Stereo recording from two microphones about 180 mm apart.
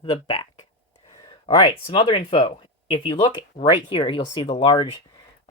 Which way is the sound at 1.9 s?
30° left (ahead or behind).